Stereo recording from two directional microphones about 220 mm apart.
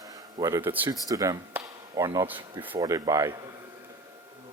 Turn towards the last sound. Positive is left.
turn(degrees=-15)  # may be behind; listen again after turning